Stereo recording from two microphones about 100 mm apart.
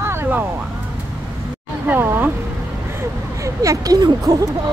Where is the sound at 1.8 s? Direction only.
20° right (ahead or behind); by 4.4 s 40° right (ahead or behind).